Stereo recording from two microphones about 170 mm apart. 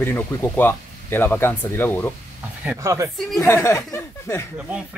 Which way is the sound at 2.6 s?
10° right (ahead or behind).